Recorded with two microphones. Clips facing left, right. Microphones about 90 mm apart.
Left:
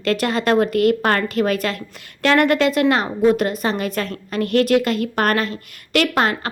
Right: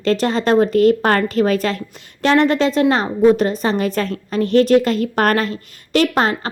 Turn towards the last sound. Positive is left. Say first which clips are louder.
# right 2 dB
turn(degrees=-30)  # may be behind; listen again after turning